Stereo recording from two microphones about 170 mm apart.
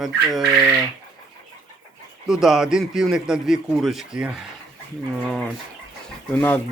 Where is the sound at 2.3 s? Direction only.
Centre (ahead or behind).